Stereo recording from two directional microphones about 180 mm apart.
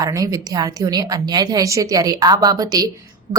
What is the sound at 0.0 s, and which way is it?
A woman's voice, 20° right (ahead or behind).